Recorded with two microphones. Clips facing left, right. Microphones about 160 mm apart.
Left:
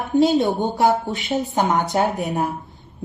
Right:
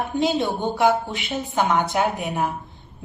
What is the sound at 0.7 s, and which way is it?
A woman's voice, 40° left (ahead or behind).